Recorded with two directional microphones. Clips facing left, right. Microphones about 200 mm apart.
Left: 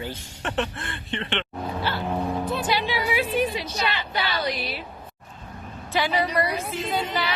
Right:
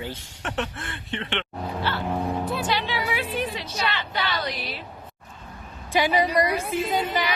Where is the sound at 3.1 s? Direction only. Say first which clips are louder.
Left 4 dB; 10° left (ahead or behind).